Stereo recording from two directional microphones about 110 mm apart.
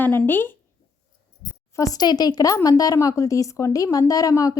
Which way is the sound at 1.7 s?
35° left (ahead or behind).